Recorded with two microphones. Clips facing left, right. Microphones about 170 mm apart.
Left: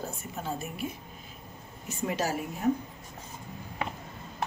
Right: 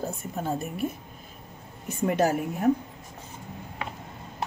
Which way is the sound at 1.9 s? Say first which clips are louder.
Right 7 dB; 55° right (ahead or behind).